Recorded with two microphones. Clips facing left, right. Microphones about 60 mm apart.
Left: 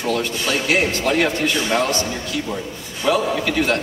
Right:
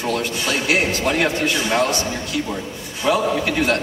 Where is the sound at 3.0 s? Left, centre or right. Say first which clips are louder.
Even; centre.